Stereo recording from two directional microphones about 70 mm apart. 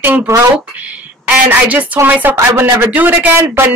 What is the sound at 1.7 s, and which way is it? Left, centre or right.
Speech, right.